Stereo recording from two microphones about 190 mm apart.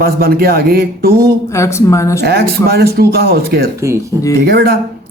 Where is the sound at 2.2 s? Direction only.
55° right (ahead or behind).